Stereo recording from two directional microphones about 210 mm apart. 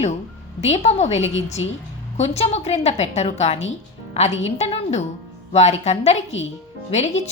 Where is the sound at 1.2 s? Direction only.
60° left (ahead or behind).